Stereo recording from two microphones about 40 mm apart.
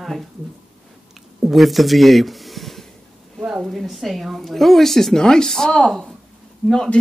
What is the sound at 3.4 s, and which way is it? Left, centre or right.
Speech, centre.